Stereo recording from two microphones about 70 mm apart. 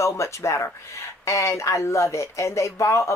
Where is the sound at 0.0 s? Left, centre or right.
Left.